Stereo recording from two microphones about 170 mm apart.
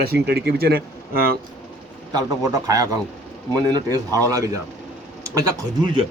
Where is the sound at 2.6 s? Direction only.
20° right (ahead or behind).